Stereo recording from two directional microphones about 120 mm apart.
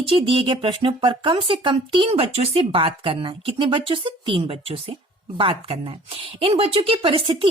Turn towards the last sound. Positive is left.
turn(degrees=-45)  # may be behind; listen again after turning